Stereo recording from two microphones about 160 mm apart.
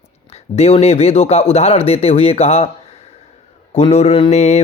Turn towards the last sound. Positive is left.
turn(degrees=45)  # may be behind; listen again after turning